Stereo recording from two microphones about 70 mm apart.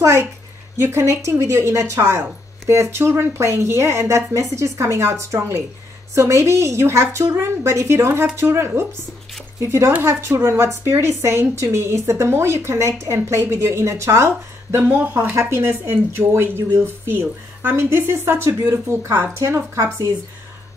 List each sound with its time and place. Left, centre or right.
0.7 s a woman's voice: right